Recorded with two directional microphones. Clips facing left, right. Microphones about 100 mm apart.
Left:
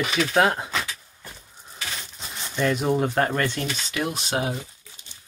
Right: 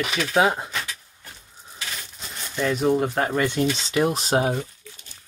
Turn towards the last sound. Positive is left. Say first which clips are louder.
# right 5 dB
turn(degrees=-35)  # may be behind; listen again after turning